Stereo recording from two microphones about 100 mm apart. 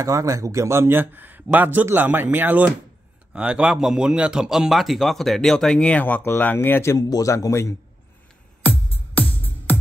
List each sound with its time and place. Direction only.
0.0 s a man's voice: 35° right (ahead or behind); by 7.7 s 30° left (ahead or behind)